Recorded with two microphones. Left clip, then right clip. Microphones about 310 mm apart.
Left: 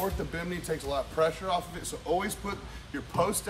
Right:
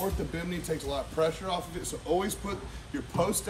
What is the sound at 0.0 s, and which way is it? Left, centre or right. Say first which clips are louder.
Speech: left 1 dB; centre.